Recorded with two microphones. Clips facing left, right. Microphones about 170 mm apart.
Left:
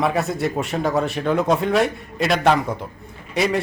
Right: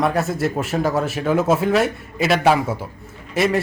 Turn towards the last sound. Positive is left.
turn(degrees=0)  # may be behind; listen again after turning